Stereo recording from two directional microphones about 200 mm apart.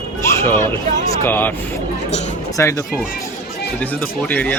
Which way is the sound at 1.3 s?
10° left (ahead or behind).